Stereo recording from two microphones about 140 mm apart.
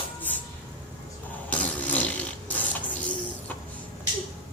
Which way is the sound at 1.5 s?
10° left (ahead or behind).